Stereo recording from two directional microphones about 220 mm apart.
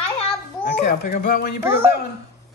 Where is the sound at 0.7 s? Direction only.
45° left (ahead or behind).